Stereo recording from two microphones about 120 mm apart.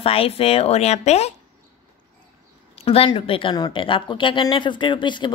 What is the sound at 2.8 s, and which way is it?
Speech, 50° left (ahead or behind).